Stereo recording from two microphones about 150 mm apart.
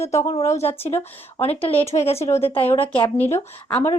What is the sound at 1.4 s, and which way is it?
Speech, 40° left (ahead or behind).